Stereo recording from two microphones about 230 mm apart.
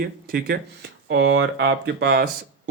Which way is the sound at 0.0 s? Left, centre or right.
Right.